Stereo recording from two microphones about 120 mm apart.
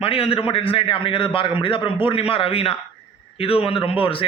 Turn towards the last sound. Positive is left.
turn(degrees=50)  # may be behind; listen again after turning